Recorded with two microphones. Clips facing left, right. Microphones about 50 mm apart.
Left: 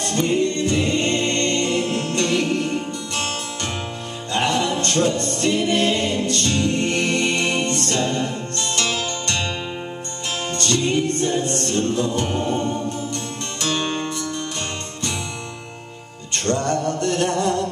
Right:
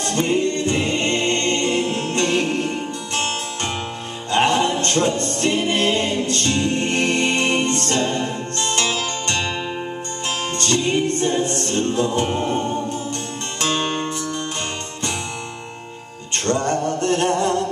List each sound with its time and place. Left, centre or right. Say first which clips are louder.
0.0 s choir: even; right
4.3 s music: right 3 dB; right
10.6 s music: right 1 dB; right
13.1 s music: right 1 dB; right
16.4 s male singing: right 1 dB; right